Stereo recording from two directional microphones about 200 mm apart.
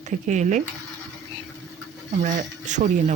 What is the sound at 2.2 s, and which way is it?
Speech, 40° right (ahead or behind).